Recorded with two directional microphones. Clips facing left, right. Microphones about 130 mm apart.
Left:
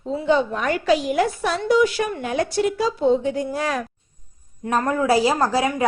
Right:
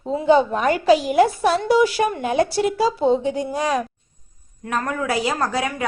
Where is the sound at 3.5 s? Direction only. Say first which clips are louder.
Right 3 dB; 15° right (ahead or behind).